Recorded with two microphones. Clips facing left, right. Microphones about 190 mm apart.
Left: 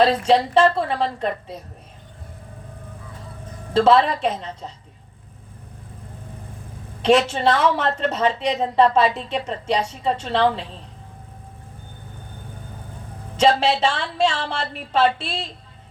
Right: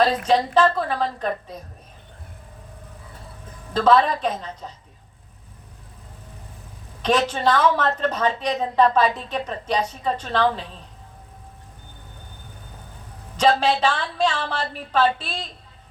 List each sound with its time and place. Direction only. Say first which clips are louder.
0.3 s a woman's voice: left 2 dB; 25° left (ahead or behind)
3.8 s a woman's voice: left 2 dB; 25° left (ahead or behind)
7.0 s a woman's voice: left 4 dB; 25° left (ahead or behind)
13.3 s a woman's voice: left 1 dB; 25° left (ahead or behind)